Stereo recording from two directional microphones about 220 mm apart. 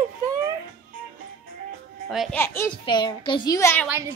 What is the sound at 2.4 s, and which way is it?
Speech, 10° left (ahead or behind).